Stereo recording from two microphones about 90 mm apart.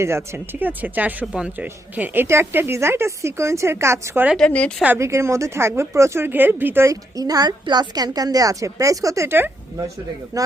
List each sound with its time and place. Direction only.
0.0 s speech: 30° right (ahead or behind)
4.4 s a woman's voice: 15° left (ahead or behind)
4.9 s speech: 35° right (ahead or behind)
6.8 s a woman's voice: 40° right (ahead or behind)
10.3 s a woman's voice: 40° right (ahead or behind)